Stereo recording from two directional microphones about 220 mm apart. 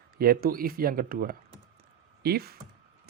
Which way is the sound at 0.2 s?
45° right (ahead or behind).